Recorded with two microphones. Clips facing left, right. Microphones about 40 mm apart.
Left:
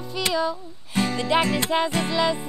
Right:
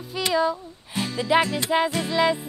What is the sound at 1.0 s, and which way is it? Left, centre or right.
Music, centre.